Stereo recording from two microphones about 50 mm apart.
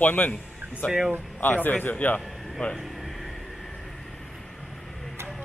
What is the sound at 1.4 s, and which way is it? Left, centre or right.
Speech, left.